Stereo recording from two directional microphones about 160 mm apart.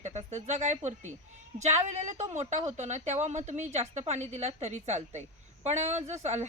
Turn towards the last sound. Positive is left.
turn(degrees=-45)  # may be behind; listen again after turning